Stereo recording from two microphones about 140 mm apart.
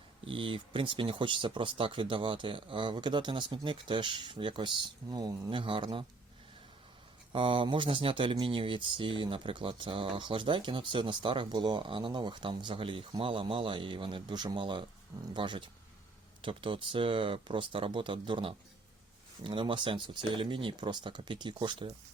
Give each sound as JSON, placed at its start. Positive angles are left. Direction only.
{"t": 0.3, "sound": "speech", "side_deg": -40}
{"t": 7.3, "sound": "speech", "side_deg": -40}